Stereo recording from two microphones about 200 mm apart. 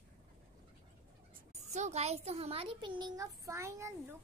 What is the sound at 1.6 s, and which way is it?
A child's voice, 35° right (ahead or behind).